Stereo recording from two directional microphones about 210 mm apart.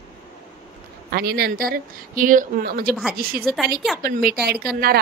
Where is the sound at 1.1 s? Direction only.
45° right (ahead or behind).